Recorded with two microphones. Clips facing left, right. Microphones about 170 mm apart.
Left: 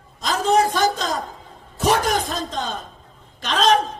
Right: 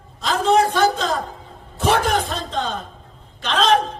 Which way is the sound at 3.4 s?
40° left (ahead or behind).